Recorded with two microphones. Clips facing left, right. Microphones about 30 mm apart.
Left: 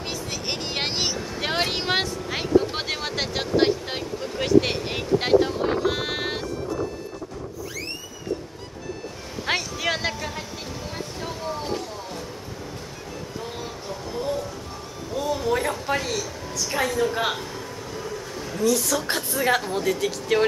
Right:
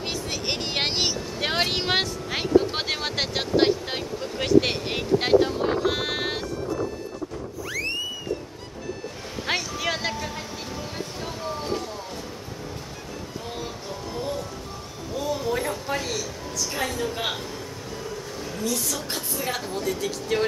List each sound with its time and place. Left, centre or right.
0.0 s vehicle: centre
2.7 s speech: centre
9.5 s music: centre
11.2 s a sound: centre
13.6 s music: centre
15.1 s a sound: centre
16.8 s a woman's voice: centre
18.0 s music: centre
19.0 s a woman's voice: left
19.6 s speech: centre
20.3 s a woman's voice: centre